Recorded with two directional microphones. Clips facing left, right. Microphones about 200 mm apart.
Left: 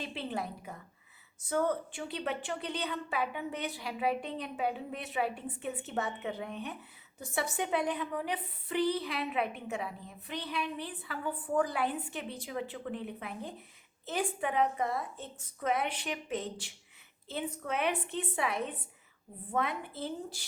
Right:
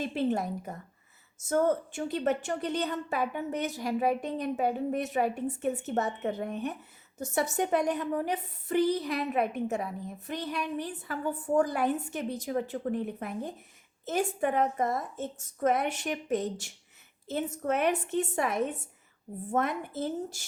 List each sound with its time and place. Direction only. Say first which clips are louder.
0.0 s a woman's voice: right 8 dB; 45° right (ahead or behind)